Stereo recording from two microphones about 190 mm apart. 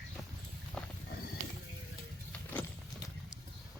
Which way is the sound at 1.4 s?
40° right (ahead or behind).